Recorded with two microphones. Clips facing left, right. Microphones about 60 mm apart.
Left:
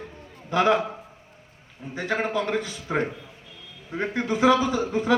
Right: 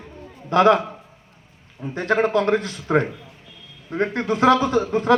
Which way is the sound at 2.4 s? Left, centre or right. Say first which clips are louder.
Right 6 dB; right.